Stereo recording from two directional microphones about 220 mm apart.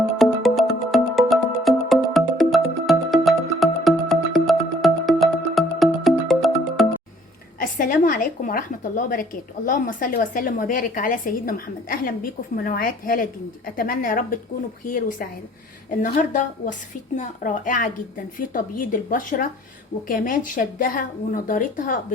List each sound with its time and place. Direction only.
0.2 s music: centre (ahead or behind)
7.6 s a woman's voice: 40° left (ahead or behind)